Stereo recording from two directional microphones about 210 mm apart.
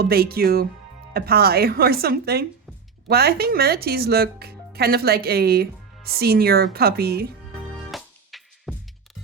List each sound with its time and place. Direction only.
0.0 s speech: 45° right (ahead or behind)
7.9 s music: centre (ahead or behind)